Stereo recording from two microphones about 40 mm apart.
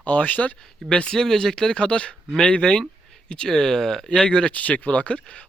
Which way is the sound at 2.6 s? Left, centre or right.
Centre.